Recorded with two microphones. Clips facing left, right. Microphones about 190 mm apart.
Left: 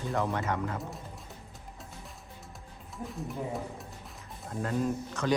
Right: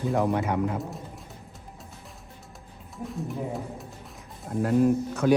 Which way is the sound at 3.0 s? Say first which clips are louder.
Right 4 dB; centre (ahead or behind).